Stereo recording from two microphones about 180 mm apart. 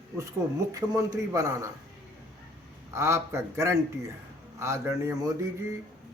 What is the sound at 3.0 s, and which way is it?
Speech, 15° right (ahead or behind).